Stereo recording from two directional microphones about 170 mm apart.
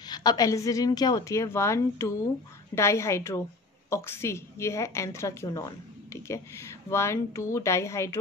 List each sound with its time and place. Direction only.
0.1 s a woman's voice: 25° left (ahead or behind)